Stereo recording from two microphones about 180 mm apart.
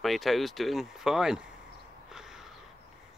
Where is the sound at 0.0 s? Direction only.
Centre (ahead or behind).